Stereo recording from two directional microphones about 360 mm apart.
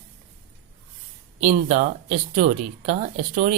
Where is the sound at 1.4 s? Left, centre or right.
Centre.